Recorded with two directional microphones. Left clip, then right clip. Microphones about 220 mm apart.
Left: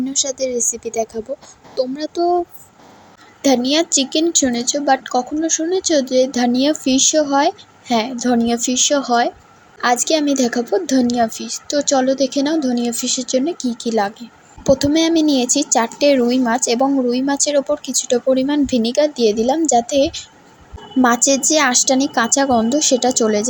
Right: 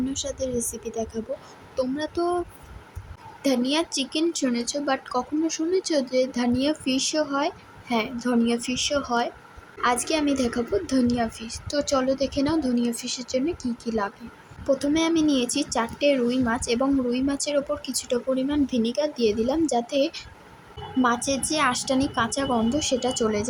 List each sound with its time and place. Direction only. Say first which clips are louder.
0.1 s a woman's voice: left 8 dB; 20° left (ahead or behind)
3.4 s a woman's voice: left 8 dB; 15° left (ahead or behind)